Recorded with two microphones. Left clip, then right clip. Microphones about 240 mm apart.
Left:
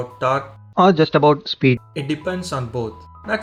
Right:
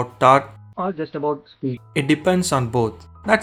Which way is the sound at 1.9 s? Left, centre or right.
Right.